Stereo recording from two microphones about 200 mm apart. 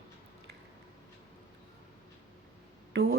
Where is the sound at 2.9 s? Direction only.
55° right (ahead or behind).